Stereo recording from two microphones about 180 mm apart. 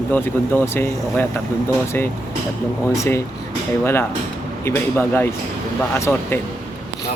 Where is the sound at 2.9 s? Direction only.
15° left (ahead or behind).